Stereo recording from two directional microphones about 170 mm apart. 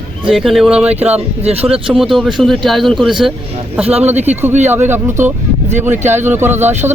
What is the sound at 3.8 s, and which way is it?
Speech, 40° right (ahead or behind).